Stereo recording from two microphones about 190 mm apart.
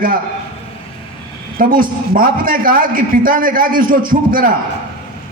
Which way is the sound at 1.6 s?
45° right (ahead or behind).